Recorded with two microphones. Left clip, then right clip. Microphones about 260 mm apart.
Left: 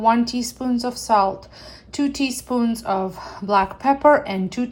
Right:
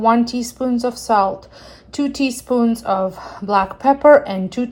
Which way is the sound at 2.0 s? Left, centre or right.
Right.